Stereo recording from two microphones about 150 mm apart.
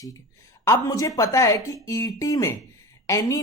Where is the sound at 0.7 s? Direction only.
20° left (ahead or behind).